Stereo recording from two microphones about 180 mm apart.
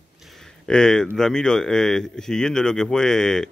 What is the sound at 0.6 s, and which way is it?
Speech, 5° left (ahead or behind).